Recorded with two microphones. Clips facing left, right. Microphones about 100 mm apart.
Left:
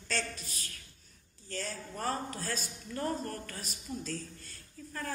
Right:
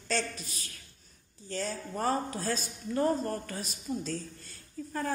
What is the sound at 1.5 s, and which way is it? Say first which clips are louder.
A man's voice: right 5 dB; 30° right (ahead or behind).